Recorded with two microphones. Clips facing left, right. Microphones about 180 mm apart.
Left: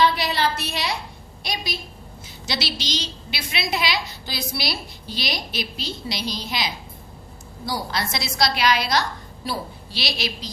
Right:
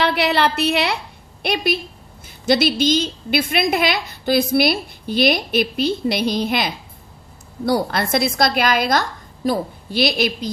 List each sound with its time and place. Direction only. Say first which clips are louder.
0.0 s a woman's voice: right 3 dB; 65° right (ahead or behind)